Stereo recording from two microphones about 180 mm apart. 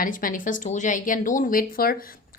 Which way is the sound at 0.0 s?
50° left (ahead or behind).